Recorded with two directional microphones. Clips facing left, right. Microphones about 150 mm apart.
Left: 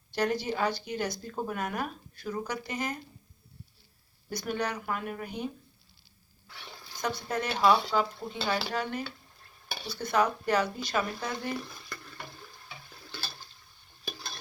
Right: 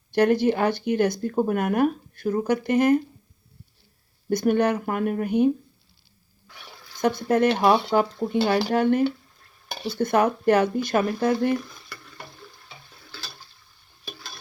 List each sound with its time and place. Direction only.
0.1 s speech: 60° right (ahead or behind)
4.3 s speech: 55° right (ahead or behind)
7.0 s speech: 55° right (ahead or behind)